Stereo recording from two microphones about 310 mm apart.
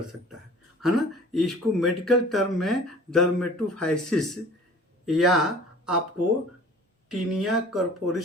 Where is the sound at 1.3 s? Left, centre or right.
Centre.